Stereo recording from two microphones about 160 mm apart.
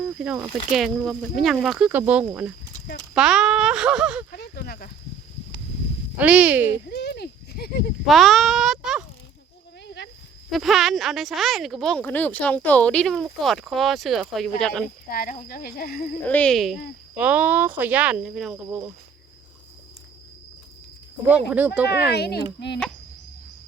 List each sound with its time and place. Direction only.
0.4 s speech: centre (ahead or behind)
4.3 s a sound: 80° left
6.1 s speech: 10° right (ahead or behind)
6.8 s a sound: 90° left; by 7.9 s 75° left (ahead or behind)
8.0 s speech: centre (ahead or behind)
9.8 s a sound: 90° left
10.5 s speech: centre (ahead or behind)
15.1 s speech: 60° left (ahead or behind)
16.2 s speech: 10° left (ahead or behind)
21.2 s speech: 10° right (ahead or behind)
22.1 s a child's voice: 90° left